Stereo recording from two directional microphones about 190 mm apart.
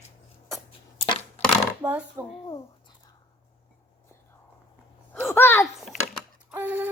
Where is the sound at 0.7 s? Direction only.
30° left (ahead or behind).